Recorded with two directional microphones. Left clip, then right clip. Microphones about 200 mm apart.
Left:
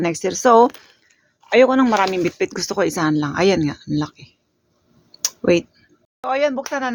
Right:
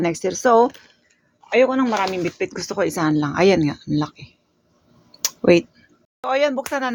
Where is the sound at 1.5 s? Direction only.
35° left (ahead or behind).